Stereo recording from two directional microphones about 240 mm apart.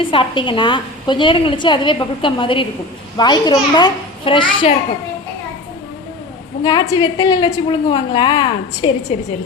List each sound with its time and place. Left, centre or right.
0.0 s a woman's voice: left
6.6 s a woman's voice: centre